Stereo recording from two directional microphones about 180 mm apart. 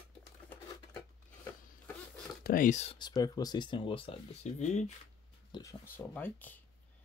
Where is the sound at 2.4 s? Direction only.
45° left (ahead or behind).